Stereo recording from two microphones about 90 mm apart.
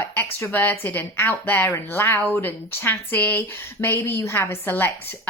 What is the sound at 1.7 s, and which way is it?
Speech, 30° left (ahead or behind).